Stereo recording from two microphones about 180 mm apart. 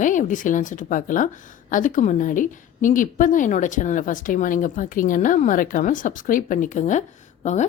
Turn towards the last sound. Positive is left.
turn(degrees=40)  # may be behind; listen again after turning